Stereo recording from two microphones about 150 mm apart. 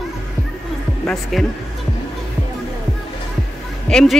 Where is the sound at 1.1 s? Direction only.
Centre (ahead or behind).